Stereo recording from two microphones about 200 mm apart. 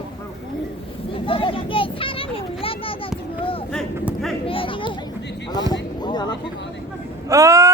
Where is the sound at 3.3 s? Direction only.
25° left (ahead or behind).